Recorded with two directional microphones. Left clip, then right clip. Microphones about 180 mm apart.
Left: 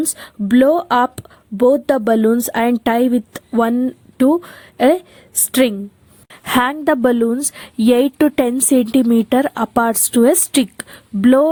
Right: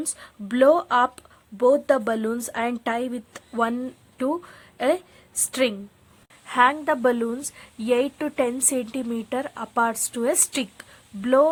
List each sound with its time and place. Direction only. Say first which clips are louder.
0.2 s a woman's voice: left 5 dB; 35° left (ahead or behind)